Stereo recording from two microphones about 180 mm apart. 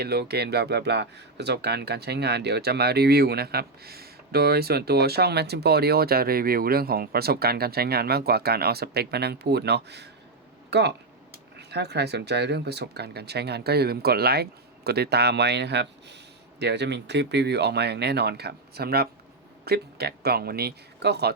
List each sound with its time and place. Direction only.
0.0 s speech: 60° right (ahead or behind)